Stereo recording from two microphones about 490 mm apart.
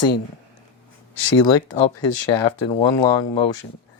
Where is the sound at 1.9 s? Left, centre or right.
Left.